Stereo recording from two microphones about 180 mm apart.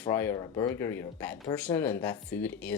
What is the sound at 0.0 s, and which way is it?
Speech, 10° left (ahead or behind).